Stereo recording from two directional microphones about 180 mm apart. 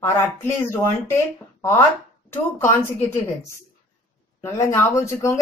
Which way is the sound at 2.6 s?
15° left (ahead or behind).